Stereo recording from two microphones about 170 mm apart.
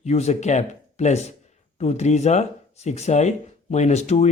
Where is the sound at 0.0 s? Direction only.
40° left (ahead or behind).